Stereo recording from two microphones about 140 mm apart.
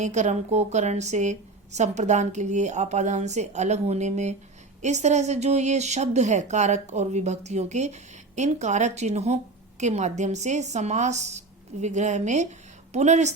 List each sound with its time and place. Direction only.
0.0 s a woman's voice: 55° right (ahead or behind)